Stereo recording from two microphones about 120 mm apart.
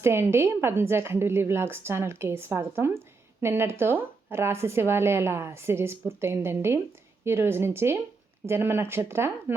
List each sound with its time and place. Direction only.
0.0 s speech: 20° right (ahead or behind)